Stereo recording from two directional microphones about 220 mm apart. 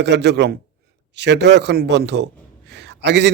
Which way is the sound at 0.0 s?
50° right (ahead or behind).